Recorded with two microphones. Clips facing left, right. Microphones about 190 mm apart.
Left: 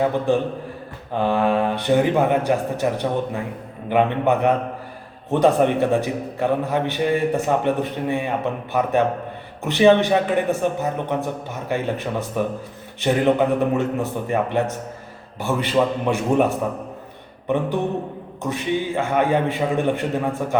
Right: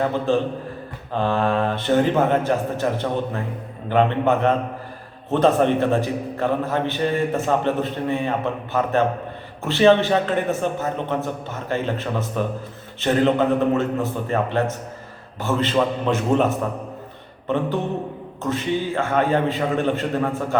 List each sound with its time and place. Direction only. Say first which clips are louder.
0.0 s a man's voice: left 1 dB; 15° left (ahead or behind)
18.4 s a man's voice: even; 15° left (ahead or behind)